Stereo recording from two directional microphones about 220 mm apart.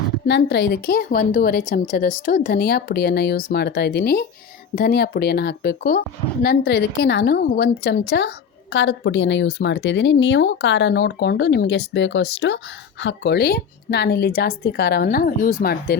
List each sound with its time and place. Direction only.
0.3 s speech: 50° left (ahead or behind)